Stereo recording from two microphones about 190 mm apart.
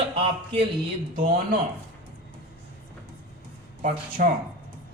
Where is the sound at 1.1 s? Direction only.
45° right (ahead or behind).